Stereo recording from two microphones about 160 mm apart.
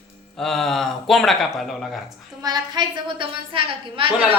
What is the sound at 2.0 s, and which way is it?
A woman's voice, 25° right (ahead or behind).